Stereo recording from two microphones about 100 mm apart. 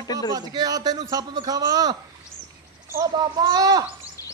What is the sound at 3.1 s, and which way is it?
Speech, 45° right (ahead or behind).